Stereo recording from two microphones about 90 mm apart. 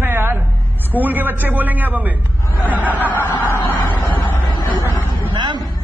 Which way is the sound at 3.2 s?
25° left (ahead or behind).